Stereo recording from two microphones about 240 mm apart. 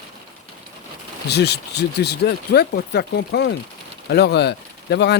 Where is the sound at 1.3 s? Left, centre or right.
Left.